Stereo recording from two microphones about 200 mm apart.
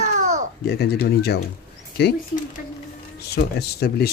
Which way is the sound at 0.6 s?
55° left (ahead or behind).